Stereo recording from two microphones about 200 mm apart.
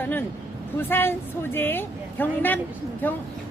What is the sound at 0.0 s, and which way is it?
A woman's voice, 10° left (ahead or behind).